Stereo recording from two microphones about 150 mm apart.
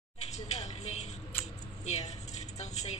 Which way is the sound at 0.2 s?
45° left (ahead or behind).